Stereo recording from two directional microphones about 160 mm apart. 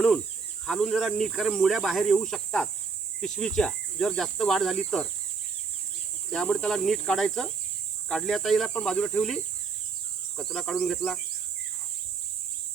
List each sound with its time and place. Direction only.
0.6 s speech: 5° left (ahead or behind)
6.3 s speech: 5° left (ahead or behind)